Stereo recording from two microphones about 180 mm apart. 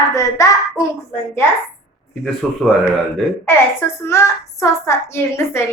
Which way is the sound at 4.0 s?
15° left (ahead or behind).